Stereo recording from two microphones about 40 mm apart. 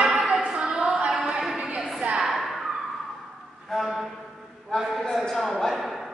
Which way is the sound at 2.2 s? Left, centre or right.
Centre.